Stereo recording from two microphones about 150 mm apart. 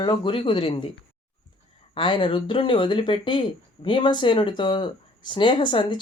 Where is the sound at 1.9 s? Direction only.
30° left (ahead or behind).